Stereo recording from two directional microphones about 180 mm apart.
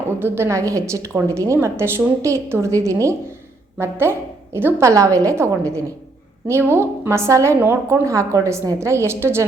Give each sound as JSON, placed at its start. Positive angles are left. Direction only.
{"t": 0.2, "sound": "a woman's voice", "side_deg": -15}